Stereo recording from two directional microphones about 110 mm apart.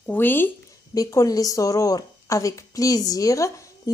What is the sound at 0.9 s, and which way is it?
Speech, 30° left (ahead or behind).